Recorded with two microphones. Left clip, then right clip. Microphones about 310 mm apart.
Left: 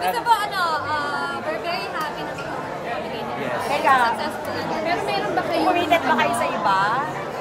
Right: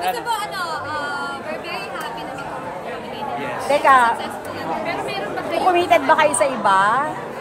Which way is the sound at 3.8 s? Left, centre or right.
Centre.